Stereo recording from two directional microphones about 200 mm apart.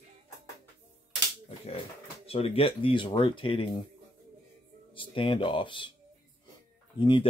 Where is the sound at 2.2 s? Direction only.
30° left (ahead or behind).